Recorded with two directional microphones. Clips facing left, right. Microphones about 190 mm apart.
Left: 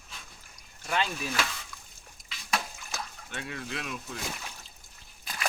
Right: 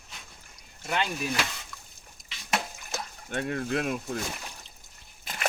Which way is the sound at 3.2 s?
50° right (ahead or behind).